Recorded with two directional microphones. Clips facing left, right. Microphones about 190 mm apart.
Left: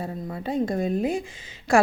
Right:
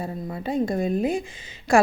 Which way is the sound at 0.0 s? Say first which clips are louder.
Right 1 dB; 15° right (ahead or behind).